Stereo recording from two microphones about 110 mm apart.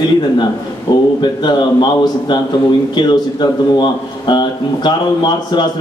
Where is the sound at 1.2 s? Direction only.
45° left (ahead or behind).